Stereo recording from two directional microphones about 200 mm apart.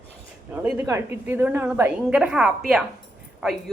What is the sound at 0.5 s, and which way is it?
A woman's voice, 5° right (ahead or behind).